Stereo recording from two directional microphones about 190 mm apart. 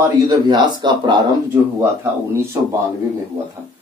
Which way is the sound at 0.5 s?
25° right (ahead or behind).